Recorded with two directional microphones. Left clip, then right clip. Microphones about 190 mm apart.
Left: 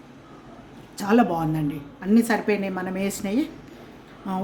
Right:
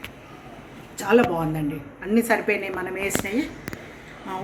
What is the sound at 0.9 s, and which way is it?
A woman's voice, 55° left (ahead or behind).